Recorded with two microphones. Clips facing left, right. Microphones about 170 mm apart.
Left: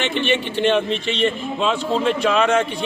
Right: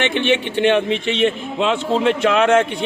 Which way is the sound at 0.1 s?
60° right (ahead or behind).